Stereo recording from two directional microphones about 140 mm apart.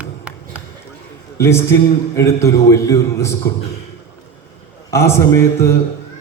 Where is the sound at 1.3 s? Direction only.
20° left (ahead or behind).